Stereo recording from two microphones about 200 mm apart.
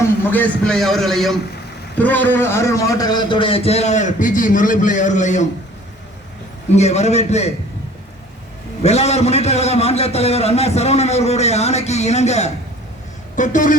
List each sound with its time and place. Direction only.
0.0 s a man's voice: 10° left (ahead or behind); by 5.5 s 35° left (ahead or behind)
6.7 s a man's voice: 35° left (ahead or behind)
8.8 s a man's voice: 30° left (ahead or behind)